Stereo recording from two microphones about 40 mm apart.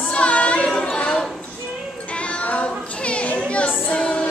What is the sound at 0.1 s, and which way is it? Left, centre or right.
Child singing, left.